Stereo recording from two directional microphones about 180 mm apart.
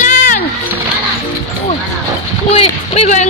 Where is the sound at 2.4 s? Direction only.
35° left (ahead or behind).